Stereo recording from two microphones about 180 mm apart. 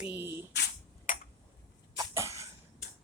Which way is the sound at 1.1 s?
45° left (ahead or behind).